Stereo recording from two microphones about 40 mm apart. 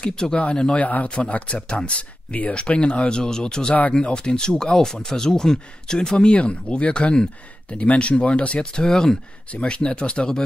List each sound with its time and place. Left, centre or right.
0.0 s speech: centre
0.7 s a man's voice: left
1.3 s speech: left
8.8 s speech: centre
9.6 s speech: left